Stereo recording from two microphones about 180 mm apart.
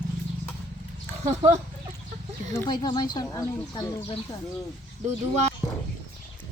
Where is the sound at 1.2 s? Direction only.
40° right (ahead or behind).